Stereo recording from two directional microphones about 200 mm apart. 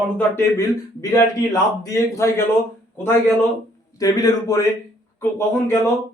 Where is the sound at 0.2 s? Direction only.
15° left (ahead or behind).